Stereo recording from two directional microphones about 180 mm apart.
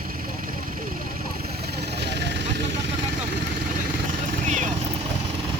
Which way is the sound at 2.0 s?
70° right (ahead or behind).